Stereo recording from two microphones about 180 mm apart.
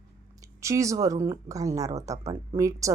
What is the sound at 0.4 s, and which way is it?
Speech, 15° right (ahead or behind).